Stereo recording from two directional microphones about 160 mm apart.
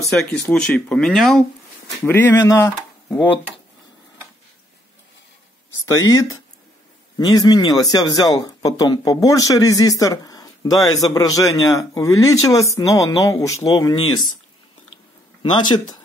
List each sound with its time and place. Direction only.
0.0 s speech: centre (ahead or behind)
2.0 s speech: 15° left (ahead or behind)
5.9 s speech: 20° left (ahead or behind)